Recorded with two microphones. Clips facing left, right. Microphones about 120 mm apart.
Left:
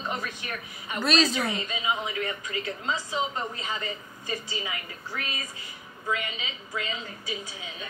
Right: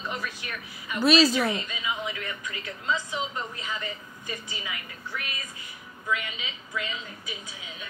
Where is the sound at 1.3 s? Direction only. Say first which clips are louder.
Right 2 dB; 30° left (ahead or behind).